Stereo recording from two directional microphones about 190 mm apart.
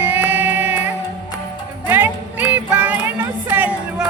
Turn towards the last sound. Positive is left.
turn(degrees=-10)  # may be behind; listen again after turning